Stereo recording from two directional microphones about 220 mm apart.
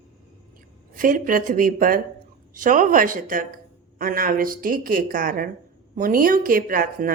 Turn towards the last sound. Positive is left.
turn(degrees=-40)  # may be behind; listen again after turning